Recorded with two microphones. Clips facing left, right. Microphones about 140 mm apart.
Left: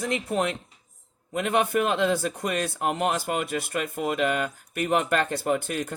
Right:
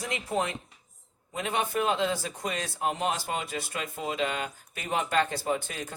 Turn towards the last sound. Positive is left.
turn(degrees=60)  # may be behind; listen again after turning